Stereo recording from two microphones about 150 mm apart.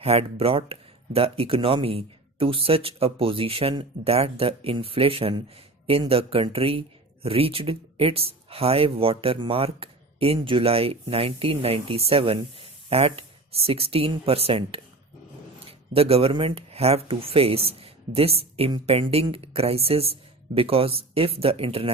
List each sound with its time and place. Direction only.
0.0 s speech: 40° right (ahead or behind)